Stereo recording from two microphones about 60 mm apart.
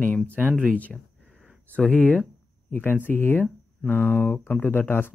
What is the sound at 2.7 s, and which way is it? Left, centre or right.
Speech, left.